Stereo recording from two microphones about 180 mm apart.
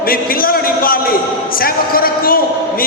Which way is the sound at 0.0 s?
55° left (ahead or behind).